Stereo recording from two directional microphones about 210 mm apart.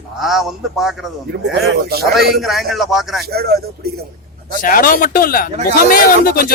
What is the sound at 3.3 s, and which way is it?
Speech, 50° right (ahead or behind).